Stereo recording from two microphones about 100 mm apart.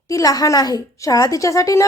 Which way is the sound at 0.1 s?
35° left (ahead or behind).